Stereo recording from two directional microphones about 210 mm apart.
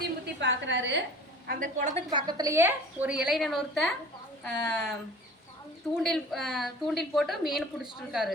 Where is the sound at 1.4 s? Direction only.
40° right (ahead or behind).